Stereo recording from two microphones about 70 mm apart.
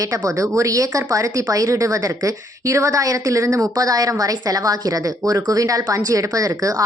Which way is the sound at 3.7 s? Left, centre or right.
Right.